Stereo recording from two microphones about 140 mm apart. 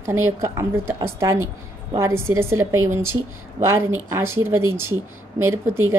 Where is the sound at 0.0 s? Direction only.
20° right (ahead or behind).